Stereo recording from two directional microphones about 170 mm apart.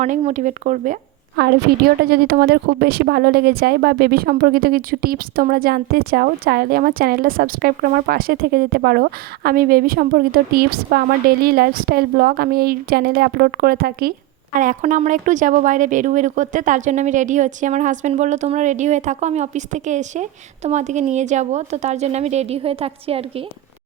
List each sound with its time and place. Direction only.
0.2 s speech: 45° right (ahead or behind)
1.4 s a woman's voice: 70° right (ahead or behind)
14.5 s a woman's voice: 50° right (ahead or behind); by 23.2 s 35° right (ahead or behind)